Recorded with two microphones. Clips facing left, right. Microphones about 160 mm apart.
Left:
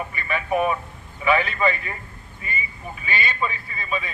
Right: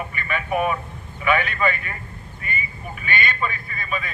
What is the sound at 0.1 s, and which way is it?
A man's voice, 30° left (ahead or behind).